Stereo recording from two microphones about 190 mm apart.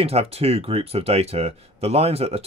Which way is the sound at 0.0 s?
30° right (ahead or behind).